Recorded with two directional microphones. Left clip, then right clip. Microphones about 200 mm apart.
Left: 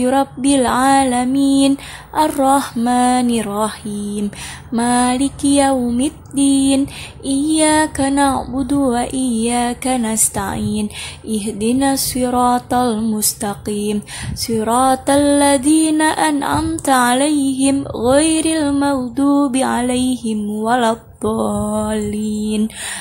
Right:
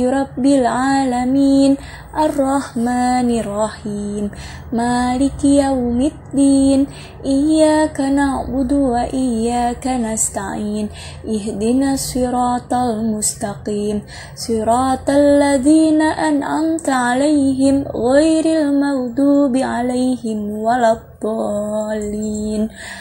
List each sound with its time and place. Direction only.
0.0 s music: 15° left (ahead or behind)